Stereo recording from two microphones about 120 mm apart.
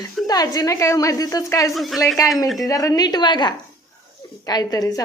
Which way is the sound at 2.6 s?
30° left (ahead or behind).